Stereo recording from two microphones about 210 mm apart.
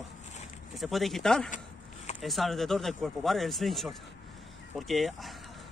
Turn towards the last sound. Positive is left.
turn(degrees=0)  # may be behind; listen again after turning